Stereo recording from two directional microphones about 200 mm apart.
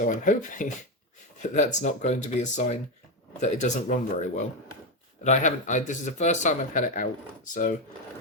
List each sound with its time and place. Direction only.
0.0 s speech: 40° left (ahead or behind)